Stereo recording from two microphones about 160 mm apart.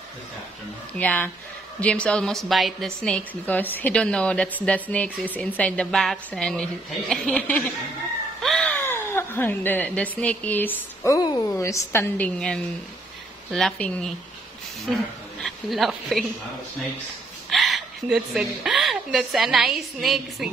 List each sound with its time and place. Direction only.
0.9 s a woman's voice: 10° left (ahead or behind)
11.1 s a woman's voice: 25° left (ahead or behind); by 14.1 s 5° left (ahead or behind)
15.4 s a woman's voice: centre (ahead or behind)
17.5 s a woman's voice: centre (ahead or behind)